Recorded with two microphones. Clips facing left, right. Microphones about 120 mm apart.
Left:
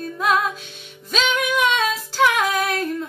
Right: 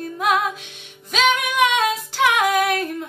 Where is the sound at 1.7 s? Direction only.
65° right (ahead or behind).